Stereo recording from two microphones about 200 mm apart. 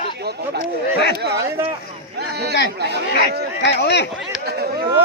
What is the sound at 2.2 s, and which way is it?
A man's voice, 55° right (ahead or behind).